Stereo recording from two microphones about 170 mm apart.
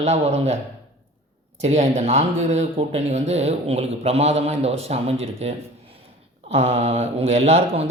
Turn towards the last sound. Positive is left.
turn(degrees=-35)  # may be behind; listen again after turning